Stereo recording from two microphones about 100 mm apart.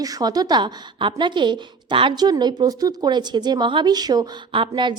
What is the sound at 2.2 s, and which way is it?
A woman's voice, 45° right (ahead or behind).